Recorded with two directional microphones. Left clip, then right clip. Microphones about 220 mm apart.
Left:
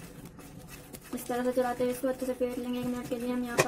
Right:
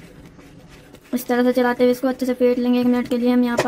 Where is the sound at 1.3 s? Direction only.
40° right (ahead or behind).